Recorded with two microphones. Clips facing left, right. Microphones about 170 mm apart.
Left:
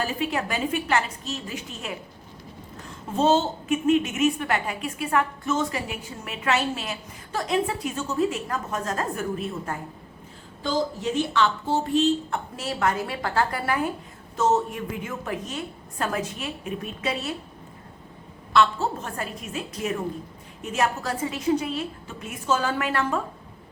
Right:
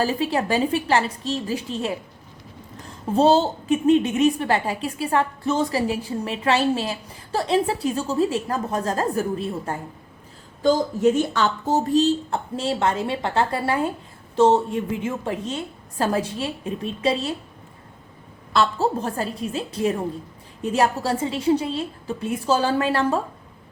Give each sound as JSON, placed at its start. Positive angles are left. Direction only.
{"t": 0.0, "sound": "a woman's voice", "side_deg": -35}
{"t": 10.6, "sound": "speech", "side_deg": -45}
{"t": 18.5, "sound": "a woman's voice", "side_deg": -35}